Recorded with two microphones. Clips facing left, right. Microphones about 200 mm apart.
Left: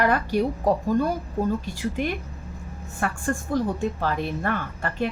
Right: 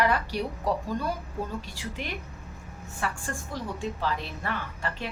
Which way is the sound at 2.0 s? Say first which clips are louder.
Left 9 dB; 50° left (ahead or behind).